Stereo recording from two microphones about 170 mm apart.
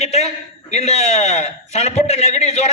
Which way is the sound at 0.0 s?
40° left (ahead or behind).